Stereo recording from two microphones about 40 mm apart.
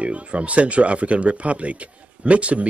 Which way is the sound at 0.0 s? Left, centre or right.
Right.